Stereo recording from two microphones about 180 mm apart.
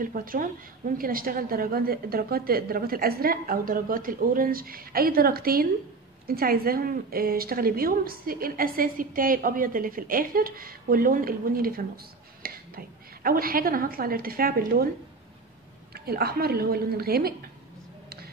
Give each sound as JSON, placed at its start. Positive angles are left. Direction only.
{"t": 0.0, "sound": "a woman's voice", "side_deg": -50}
{"t": 15.9, "sound": "a woman's voice", "side_deg": -60}